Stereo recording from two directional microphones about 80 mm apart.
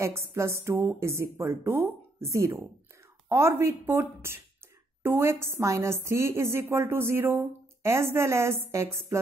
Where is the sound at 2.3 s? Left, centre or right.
Right.